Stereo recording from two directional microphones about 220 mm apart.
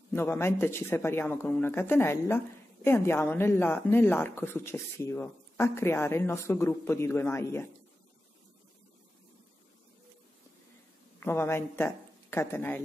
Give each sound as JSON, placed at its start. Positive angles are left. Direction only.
{"t": 0.1, "sound": "speech", "side_deg": 10}
{"t": 11.1, "sound": "a woman's voice", "side_deg": 10}